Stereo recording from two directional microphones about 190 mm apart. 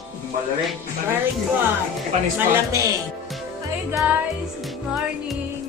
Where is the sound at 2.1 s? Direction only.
40° right (ahead or behind).